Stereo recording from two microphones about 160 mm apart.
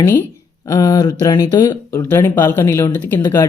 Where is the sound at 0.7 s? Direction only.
25° left (ahead or behind).